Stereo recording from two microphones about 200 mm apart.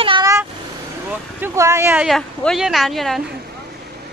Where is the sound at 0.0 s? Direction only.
25° right (ahead or behind).